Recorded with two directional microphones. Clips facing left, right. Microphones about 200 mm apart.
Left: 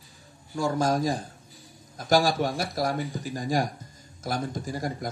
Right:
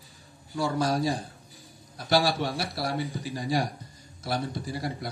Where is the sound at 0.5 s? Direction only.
45° left (ahead or behind).